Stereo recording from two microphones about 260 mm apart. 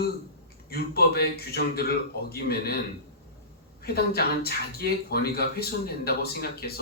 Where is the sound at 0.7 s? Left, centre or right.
Left.